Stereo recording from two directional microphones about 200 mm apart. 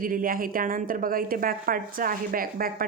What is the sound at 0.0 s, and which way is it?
A woman's voice, 45° right (ahead or behind).